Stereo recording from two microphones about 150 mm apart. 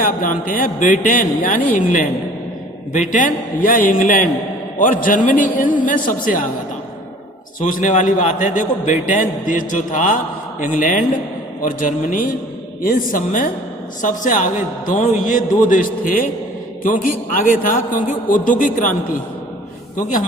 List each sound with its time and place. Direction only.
0.0 s a man's voice: 70° left (ahead or behind)
7.6 s a man's voice: 60° left (ahead or behind)
20.0 s a man's voice: 60° left (ahead or behind)